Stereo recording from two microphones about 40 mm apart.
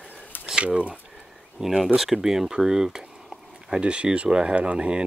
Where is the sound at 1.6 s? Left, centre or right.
Centre.